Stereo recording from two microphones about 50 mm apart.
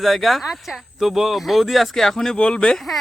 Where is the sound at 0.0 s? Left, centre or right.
Centre.